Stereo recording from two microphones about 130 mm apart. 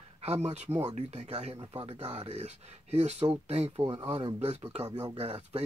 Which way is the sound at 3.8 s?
35° right (ahead or behind).